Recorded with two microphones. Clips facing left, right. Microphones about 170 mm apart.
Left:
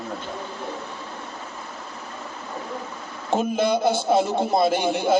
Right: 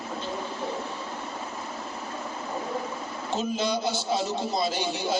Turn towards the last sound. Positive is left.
turn(degrees=55)  # may be behind; listen again after turning